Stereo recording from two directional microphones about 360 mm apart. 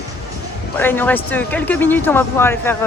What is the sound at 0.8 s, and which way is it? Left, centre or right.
Speech, centre.